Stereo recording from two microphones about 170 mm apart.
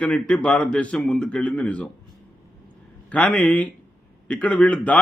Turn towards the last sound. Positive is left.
turn(degrees=10)  # may be behind; listen again after turning